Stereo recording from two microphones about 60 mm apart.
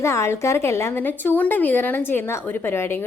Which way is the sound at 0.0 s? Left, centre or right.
Left.